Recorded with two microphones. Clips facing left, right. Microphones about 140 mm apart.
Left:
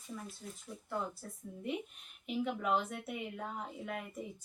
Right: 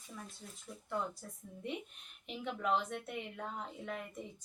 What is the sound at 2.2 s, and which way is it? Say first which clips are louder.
Speech: left 3 dB; 5° left (ahead or behind).